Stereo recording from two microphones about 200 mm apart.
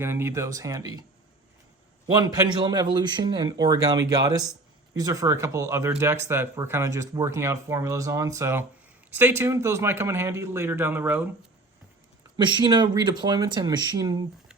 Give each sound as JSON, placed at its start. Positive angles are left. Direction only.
{"t": 0.0, "sound": "speech", "side_deg": -10}
{"t": 2.2, "sound": "speech", "side_deg": -20}
{"t": 12.4, "sound": "speech", "side_deg": -25}